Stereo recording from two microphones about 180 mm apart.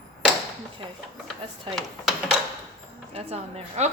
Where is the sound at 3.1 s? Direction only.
35° right (ahead or behind).